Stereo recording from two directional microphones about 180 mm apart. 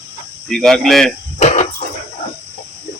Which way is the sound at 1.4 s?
40° left (ahead or behind).